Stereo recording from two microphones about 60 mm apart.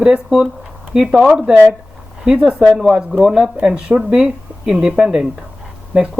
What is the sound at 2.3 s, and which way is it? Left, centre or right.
Speech, right.